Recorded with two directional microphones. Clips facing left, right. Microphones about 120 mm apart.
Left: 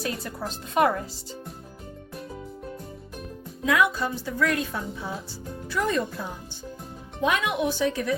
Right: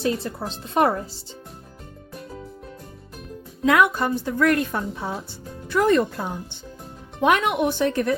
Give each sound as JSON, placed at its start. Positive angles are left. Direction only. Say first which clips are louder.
{"t": 0.0, "sound": "speech", "louder": "right 6 dB", "side_deg": -25}
{"t": 3.7, "sound": "a woman's voice", "louder": "right 4 dB", "side_deg": -60}